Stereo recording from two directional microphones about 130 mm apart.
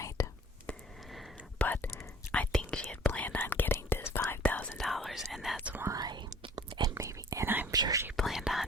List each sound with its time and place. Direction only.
0.2 s whispering: 25° left (ahead or behind)
0.7 s whispering: 5° left (ahead or behind)
1.6 s whispering: 15° left (ahead or behind); by 5.7 s centre (ahead or behind)
5.7 s whispering: 25° right (ahead or behind)
7.7 s whispering: 30° right (ahead or behind)
8.1 s whispering: centre (ahead or behind)